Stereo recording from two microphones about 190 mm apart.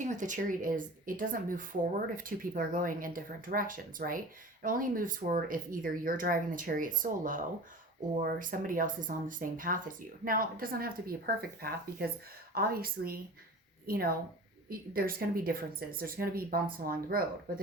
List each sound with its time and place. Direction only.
0.0 s a woman's voice: 40° right (ahead or behind)
12.5 s a woman's voice: 50° right (ahead or behind)